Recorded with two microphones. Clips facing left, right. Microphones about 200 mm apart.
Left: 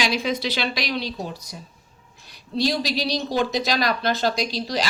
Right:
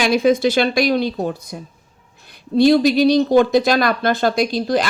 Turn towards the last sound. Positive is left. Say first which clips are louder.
# right 8 dB
turn(degrees=-55)  # may be behind; listen again after turning